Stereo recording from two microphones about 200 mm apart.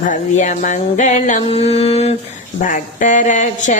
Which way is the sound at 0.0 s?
40° left (ahead or behind).